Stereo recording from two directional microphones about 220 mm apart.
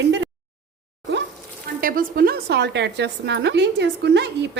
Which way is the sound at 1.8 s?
40° right (ahead or behind).